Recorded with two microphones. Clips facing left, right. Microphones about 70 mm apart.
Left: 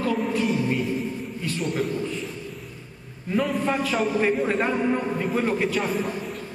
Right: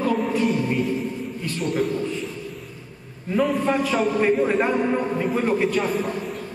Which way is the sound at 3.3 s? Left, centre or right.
Centre.